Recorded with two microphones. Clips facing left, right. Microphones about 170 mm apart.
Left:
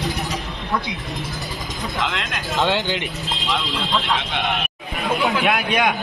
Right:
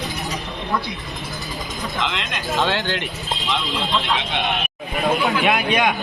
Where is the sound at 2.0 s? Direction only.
Centre (ahead or behind).